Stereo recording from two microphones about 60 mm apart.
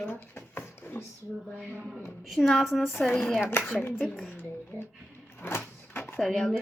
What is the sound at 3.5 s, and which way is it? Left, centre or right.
Speech, left.